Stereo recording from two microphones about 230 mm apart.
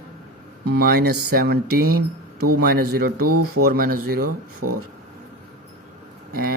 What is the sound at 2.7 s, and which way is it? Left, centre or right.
Speech, right.